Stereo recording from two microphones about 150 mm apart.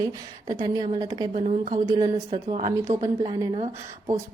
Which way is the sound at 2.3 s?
40° right (ahead or behind).